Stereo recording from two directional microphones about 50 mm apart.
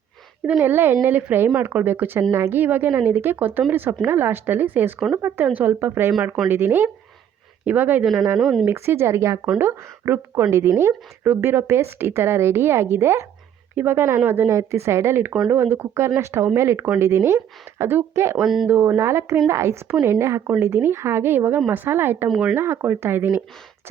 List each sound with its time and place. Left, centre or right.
0.6 s speech: right
7.6 s speech: right
8.0 s speech: centre
8.6 s speech: right
9.6 s speech: right
14.5 s speech: right
15.4 s speech: right
18.4 s speech: centre
18.7 s speech: right
18.9 s speech: right
20.6 s speech: right